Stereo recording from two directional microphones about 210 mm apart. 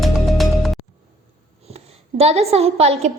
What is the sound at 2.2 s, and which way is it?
Speech, 30° right (ahead or behind).